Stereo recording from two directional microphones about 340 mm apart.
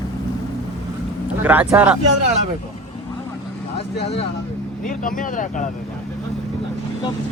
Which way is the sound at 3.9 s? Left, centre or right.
Left.